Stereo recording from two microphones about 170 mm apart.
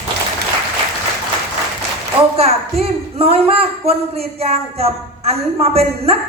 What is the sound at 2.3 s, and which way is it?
Speech, 35° right (ahead or behind).